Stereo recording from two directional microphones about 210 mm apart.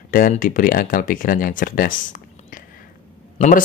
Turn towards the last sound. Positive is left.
turn(degrees=40)  # may be behind; listen again after turning